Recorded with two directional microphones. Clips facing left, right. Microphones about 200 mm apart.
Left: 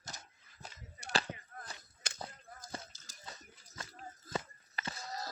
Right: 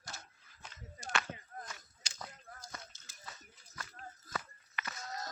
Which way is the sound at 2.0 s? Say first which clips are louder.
Left 9 dB; 55° left (ahead or behind).